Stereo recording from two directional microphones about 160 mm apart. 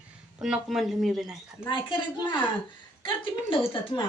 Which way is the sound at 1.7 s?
30° left (ahead or behind).